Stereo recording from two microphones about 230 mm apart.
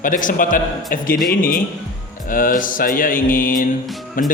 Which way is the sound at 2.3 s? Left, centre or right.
Left.